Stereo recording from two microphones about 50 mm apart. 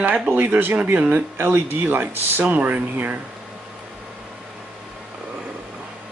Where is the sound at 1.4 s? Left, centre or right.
Right.